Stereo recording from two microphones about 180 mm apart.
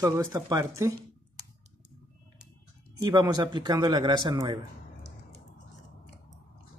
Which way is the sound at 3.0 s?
20° right (ahead or behind).